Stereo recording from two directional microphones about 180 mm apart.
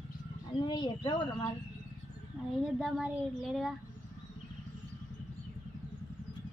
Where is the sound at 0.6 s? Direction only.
25° left (ahead or behind).